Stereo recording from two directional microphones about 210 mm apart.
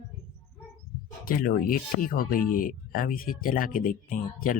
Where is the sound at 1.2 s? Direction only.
45° left (ahead or behind).